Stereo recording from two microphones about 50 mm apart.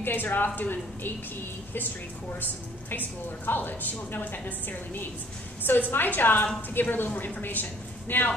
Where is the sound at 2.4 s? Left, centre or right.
Left.